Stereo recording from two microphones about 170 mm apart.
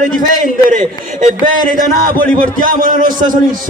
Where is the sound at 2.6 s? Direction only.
55° right (ahead or behind).